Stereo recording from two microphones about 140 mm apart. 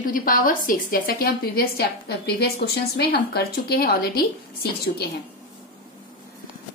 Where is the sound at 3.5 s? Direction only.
90° left.